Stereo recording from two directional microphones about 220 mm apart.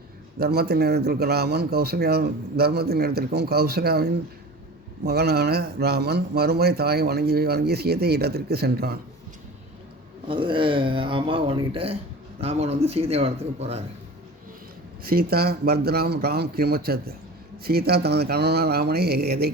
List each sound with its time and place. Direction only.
0.3 s speech: 45° right (ahead or behind)
10.2 s speech: 20° right (ahead or behind)
15.0 s speech: 45° right (ahead or behind)